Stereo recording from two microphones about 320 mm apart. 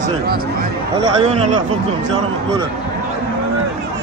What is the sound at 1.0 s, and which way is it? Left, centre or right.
Speech, centre.